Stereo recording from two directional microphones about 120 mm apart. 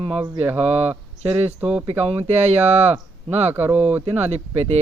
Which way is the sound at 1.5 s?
10° right (ahead or behind).